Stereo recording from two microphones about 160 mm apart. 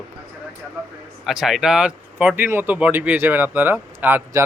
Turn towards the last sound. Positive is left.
turn(degrees=-15)  # may be behind; listen again after turning